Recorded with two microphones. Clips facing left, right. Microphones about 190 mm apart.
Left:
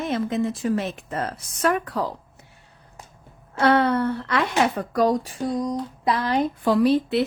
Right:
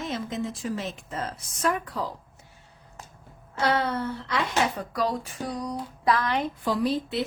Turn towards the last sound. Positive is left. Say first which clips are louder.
# left 7 dB
turn(degrees=65)  # may be behind; listen again after turning